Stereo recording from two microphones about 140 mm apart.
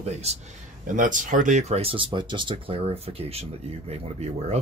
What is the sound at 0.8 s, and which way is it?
Speech, 70° right (ahead or behind).